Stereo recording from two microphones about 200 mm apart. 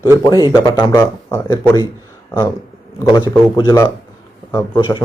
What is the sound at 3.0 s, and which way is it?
Speech, 15° left (ahead or behind).